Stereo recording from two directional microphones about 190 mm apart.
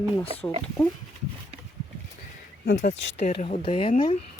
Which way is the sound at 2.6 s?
45° left (ahead or behind).